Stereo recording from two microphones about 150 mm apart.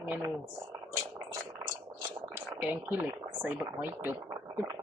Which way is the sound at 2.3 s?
15° right (ahead or behind).